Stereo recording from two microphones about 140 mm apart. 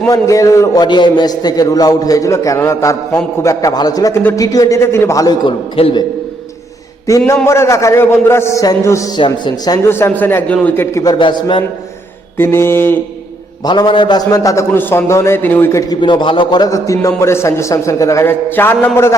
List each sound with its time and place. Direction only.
0.1 s a man's voice: 25° left (ahead or behind)
7.4 s a man's voice: 20° left (ahead or behind)
9.1 s a man's voice: 30° left (ahead or behind)
11.1 s a man's voice: 35° left (ahead or behind)
12.4 s a man's voice: 15° left (ahead or behind)
13.7 s a man's voice: 35° left (ahead or behind); by 15.8 s 15° left (ahead or behind)
15.9 s a man's voice: 30° left (ahead or behind); by 19.1 s 15° left (ahead or behind)